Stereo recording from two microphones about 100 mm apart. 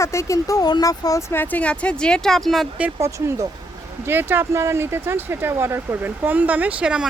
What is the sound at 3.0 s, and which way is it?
Speech, 30° right (ahead or behind).